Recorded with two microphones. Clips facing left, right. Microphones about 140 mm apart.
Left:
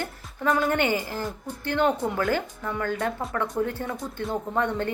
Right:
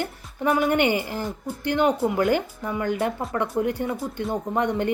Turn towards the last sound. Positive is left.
turn(degrees=-15)  # may be behind; listen again after turning